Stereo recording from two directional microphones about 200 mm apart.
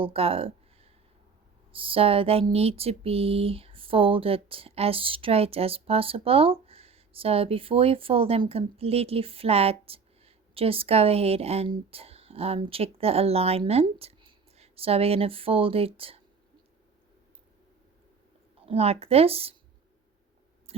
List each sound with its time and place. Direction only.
0.0 s speech: 30° right (ahead or behind)
18.6 s speech: 30° right (ahead or behind)